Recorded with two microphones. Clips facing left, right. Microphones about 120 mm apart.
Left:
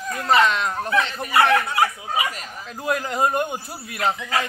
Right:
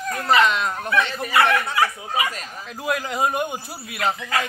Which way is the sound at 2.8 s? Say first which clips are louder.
Left 1 dB; 5° right (ahead or behind).